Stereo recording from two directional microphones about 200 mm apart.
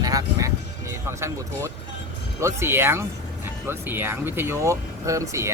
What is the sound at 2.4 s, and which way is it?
Speech, 10° right (ahead or behind).